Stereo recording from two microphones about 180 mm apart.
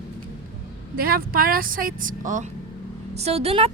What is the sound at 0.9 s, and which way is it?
A woman's voice, 55° right (ahead or behind).